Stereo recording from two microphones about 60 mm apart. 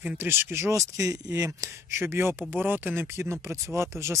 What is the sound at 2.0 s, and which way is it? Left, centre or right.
Speech, right.